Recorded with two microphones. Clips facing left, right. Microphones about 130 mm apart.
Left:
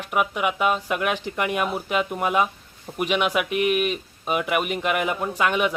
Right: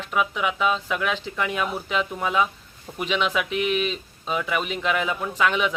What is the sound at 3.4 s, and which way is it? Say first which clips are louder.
Speech: left 2 dB; 55° left (ahead or behind).